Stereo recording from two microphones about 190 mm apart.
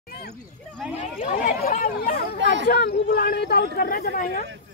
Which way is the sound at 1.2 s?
45° left (ahead or behind).